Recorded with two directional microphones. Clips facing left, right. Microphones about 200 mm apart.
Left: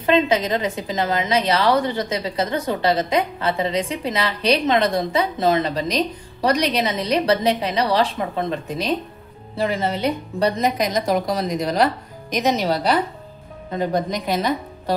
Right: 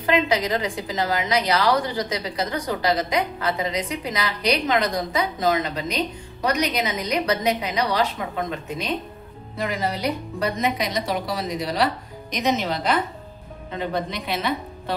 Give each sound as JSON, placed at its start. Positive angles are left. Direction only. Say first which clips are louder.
{"t": 0.0, "sound": "a woman's voice", "louder": "left 3 dB", "side_deg": 25}
{"t": 10.6, "sound": "a woman's voice", "louder": "left 4 dB", "side_deg": 45}